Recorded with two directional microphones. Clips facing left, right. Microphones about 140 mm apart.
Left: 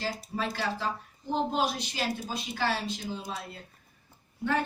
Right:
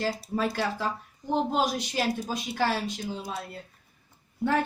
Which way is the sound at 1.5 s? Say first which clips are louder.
Right 3 dB; 45° right (ahead or behind).